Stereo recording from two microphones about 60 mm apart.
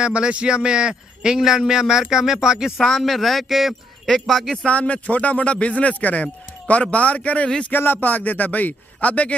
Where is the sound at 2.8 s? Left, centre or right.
Centre.